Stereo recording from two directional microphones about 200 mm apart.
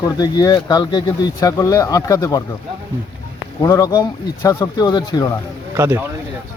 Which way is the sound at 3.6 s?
15° left (ahead or behind).